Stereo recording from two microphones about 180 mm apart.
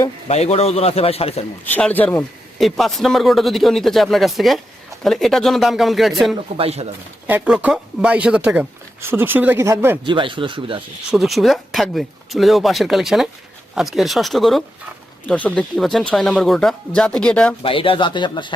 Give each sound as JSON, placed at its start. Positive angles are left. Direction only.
{"t": 0.3, "sound": "a man's voice", "side_deg": 35}
{"t": 1.7, "sound": "a man's voice", "side_deg": 10}
{"t": 6.6, "sound": "speech", "side_deg": -35}
{"t": 7.3, "sound": "speech", "side_deg": -10}
{"t": 10.0, "sound": "speech", "side_deg": -25}
{"t": 11.1, "sound": "a man's voice", "side_deg": 0}
{"t": 17.6, "sound": "speech", "side_deg": 30}